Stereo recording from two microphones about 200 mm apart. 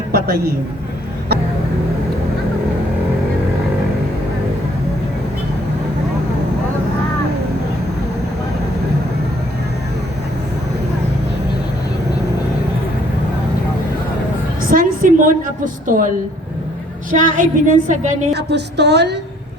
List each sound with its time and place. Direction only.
0.1 s a sound: 50° right (ahead or behind)
14.6 s music: 45° right (ahead or behind)
17.1 s a woman's voice: 40° right (ahead or behind)
18.3 s a woman's voice: 55° right (ahead or behind)